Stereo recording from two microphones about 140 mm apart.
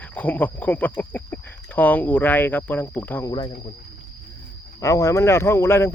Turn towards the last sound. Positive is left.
turn(degrees=20)  # may be behind; listen again after turning